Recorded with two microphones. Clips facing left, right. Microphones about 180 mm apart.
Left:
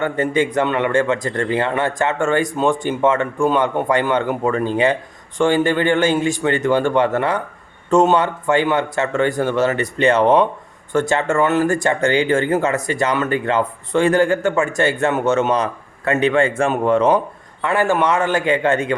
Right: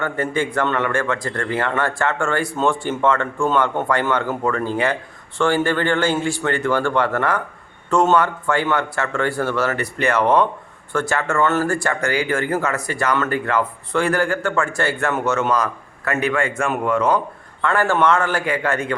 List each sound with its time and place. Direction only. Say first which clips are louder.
0.0 s speech: left 4 dB; 20° left (ahead or behind)
17.6 s speech: left 1 dB; 15° left (ahead or behind)